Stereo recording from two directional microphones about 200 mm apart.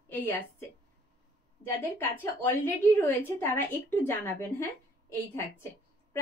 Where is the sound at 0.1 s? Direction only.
10° left (ahead or behind).